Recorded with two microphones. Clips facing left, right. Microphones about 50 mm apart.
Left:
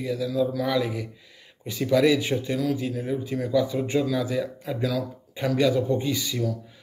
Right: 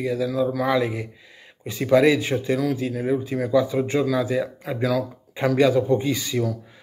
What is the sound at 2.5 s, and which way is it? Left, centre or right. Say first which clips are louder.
Speech: right 3 dB; right.